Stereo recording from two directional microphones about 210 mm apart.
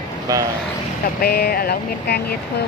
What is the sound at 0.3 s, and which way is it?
Speech, 15° right (ahead or behind).